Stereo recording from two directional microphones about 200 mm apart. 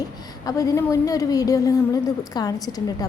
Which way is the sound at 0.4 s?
15° left (ahead or behind).